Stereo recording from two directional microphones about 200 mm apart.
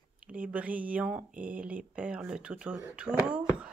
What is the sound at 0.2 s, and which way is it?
Speech, 5° right (ahead or behind).